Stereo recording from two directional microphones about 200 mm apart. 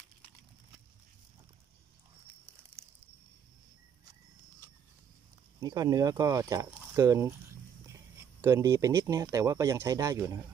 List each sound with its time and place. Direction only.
5.6 s speech: 20° right (ahead or behind)